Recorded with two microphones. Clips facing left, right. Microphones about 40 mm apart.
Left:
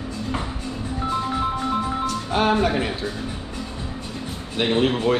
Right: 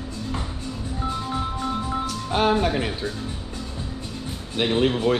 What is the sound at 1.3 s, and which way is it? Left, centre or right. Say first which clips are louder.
Music: left 4 dB; centre.